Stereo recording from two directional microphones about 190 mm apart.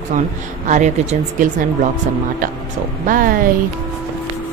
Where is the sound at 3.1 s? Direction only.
45° right (ahead or behind).